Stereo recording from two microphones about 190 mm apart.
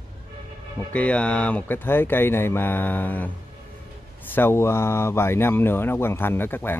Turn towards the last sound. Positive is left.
turn(degrees=10)  # may be behind; listen again after turning